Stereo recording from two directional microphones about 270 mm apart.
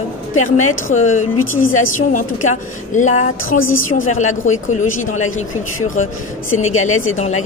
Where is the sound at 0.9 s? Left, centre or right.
Left.